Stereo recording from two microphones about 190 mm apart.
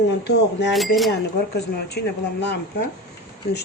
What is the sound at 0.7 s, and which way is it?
Speech, centre (ahead or behind).